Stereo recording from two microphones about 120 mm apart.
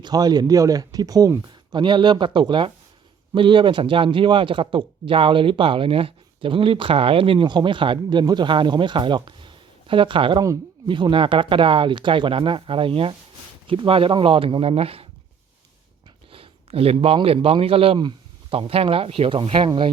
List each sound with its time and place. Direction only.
0.0 s speech: 35° right (ahead or behind); by 15.0 s 55° right (ahead or behind)
16.3 s a man's voice: 50° right (ahead or behind)